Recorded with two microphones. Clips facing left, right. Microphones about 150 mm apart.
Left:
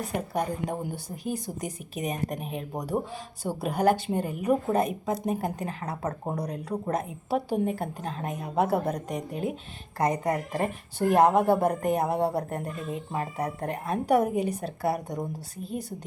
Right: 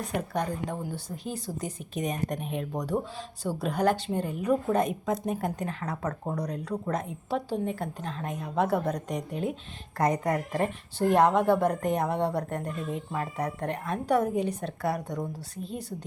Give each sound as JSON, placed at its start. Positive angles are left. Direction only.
{"t": 0.0, "sound": "a woman's voice", "side_deg": 5}
{"t": 6.0, "sound": "speech", "side_deg": 25}
{"t": 6.4, "sound": "a woman's voice", "side_deg": 5}
{"t": 13.3, "sound": "a woman's voice", "side_deg": 5}